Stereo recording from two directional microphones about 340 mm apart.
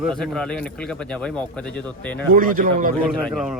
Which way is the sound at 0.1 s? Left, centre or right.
Centre.